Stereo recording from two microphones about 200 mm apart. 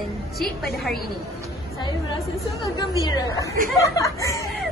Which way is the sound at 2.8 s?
20° left (ahead or behind).